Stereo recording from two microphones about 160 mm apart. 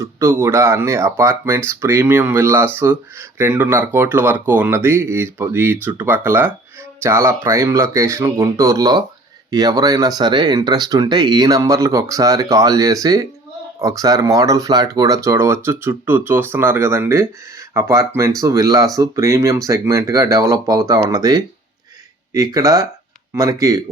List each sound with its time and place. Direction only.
0.0 s speech: 15° right (ahead or behind)